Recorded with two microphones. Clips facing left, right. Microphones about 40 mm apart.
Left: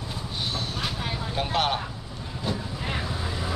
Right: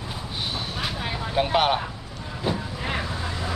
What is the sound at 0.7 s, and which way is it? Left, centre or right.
Vehicle, centre.